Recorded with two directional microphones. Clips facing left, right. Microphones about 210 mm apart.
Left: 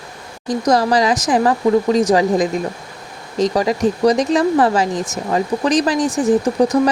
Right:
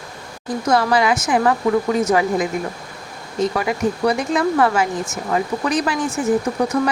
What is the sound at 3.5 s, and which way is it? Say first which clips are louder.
Speech: left 4 dB; 35° left (ahead or behind).